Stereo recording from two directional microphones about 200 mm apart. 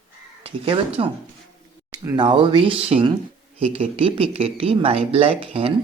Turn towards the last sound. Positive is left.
turn(degrees=-30)  # may be behind; listen again after turning